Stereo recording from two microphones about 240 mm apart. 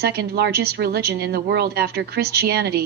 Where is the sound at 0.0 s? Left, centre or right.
Right.